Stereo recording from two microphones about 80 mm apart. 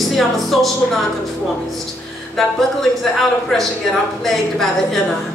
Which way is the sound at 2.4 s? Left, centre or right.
Centre.